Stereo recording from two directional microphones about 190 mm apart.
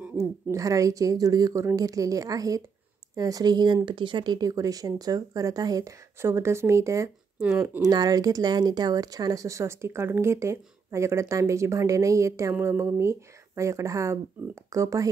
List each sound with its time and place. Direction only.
0.0 s speech: 15° right (ahead or behind)